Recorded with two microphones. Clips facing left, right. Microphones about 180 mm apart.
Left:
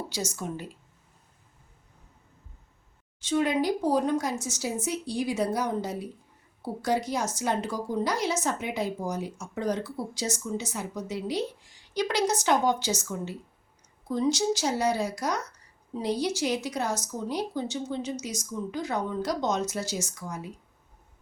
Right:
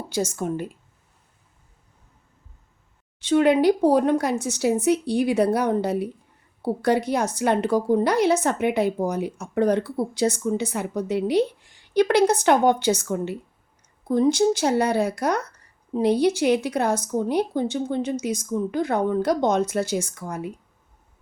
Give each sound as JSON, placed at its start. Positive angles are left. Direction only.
{"t": 0.1, "sound": "a woman's voice", "side_deg": -50}
{"t": 3.2, "sound": "a woman's voice", "side_deg": -65}